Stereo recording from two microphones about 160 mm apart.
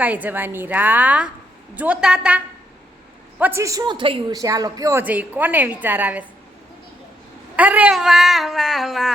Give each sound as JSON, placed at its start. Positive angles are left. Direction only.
{"t": 0.0, "sound": "a woman's voice", "side_deg": -10}
{"t": 7.5, "sound": "a woman's voice", "side_deg": -10}
{"t": 7.9, "sound": "a sound", "side_deg": 0}